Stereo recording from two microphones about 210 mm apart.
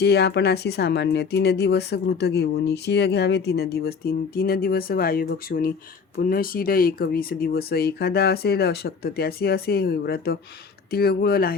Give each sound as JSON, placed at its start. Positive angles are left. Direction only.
{"t": 0.0, "sound": "speech", "side_deg": 50}